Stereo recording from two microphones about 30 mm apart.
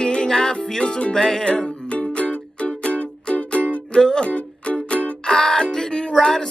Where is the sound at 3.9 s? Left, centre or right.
Left.